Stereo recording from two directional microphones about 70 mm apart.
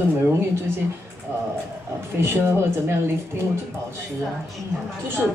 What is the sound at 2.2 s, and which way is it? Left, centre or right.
Speech, right.